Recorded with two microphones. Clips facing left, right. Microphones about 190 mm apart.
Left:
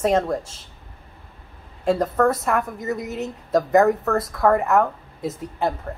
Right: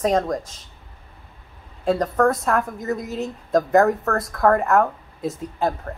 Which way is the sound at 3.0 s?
20° left (ahead or behind).